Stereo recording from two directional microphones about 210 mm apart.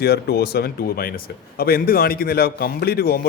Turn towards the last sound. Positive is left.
turn(degrees=45)  # may be behind; listen again after turning